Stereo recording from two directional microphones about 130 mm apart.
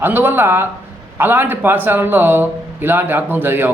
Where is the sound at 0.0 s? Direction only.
15° right (ahead or behind).